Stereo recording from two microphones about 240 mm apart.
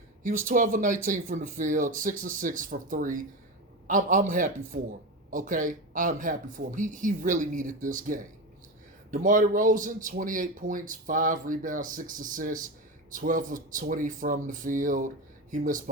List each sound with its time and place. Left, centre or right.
0.2 s speech: right